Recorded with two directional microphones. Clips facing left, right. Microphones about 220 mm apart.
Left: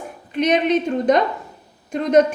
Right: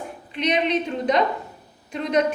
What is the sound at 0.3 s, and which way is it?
A woman's voice, 45° left (ahead or behind).